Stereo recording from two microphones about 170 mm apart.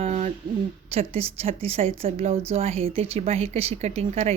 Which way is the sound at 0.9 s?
35° right (ahead or behind).